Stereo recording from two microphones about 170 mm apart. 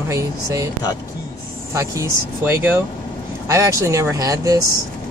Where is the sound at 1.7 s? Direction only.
15° right (ahead or behind).